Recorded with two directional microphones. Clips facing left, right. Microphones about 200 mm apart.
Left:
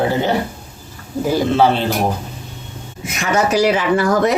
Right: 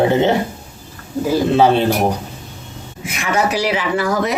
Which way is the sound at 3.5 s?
45° left (ahead or behind).